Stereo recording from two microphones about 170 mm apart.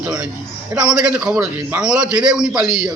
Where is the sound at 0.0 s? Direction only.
5° right (ahead or behind).